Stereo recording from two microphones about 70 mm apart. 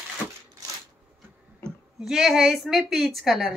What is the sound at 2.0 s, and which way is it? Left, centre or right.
A woman's voice, centre.